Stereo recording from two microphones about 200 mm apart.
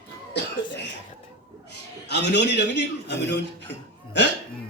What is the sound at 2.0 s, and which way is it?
Speech, 60° left (ahead or behind).